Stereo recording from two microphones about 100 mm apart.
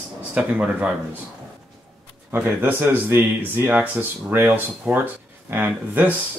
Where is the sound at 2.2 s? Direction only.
20° right (ahead or behind).